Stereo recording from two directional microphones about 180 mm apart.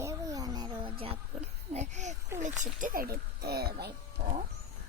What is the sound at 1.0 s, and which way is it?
A child's voice, 35° right (ahead or behind).